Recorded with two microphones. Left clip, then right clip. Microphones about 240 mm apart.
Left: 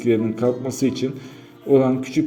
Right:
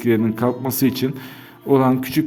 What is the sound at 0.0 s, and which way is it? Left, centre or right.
A man's voice, right.